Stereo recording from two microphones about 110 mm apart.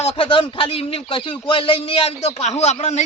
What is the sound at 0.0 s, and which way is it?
Speech, 70° left (ahead or behind).